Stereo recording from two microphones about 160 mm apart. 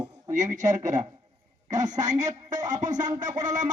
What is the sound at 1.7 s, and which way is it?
A man's voice, 50° right (ahead or behind).